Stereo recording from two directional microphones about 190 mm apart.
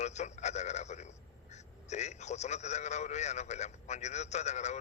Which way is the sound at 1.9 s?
35° left (ahead or behind).